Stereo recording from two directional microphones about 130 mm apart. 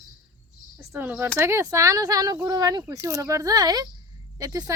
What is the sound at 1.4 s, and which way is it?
Speech, 20° right (ahead or behind).